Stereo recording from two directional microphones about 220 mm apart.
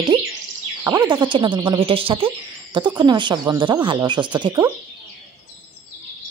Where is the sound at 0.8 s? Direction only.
15° right (ahead or behind).